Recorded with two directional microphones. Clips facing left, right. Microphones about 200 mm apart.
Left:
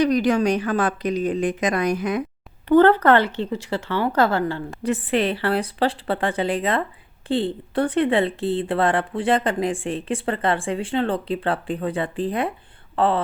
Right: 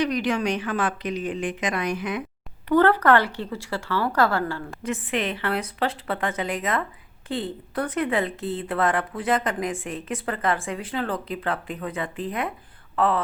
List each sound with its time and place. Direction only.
0.0 s speech: 40° left (ahead or behind)
2.6 s speech: 25° left (ahead or behind)
4.8 s speech: 35° left (ahead or behind)